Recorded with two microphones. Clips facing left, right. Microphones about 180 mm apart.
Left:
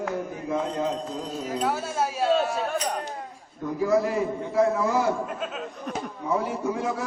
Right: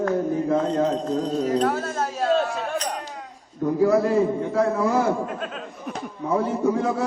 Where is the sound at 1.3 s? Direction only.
5° left (ahead or behind).